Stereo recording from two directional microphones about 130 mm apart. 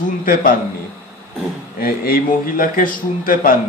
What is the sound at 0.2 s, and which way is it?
Speech, 90° left.